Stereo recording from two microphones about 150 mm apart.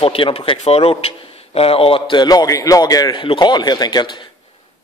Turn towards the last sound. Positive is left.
turn(degrees=30)  # may be behind; listen again after turning